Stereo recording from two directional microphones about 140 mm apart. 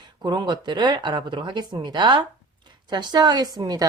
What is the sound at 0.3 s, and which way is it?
A woman's voice, 30° right (ahead or behind).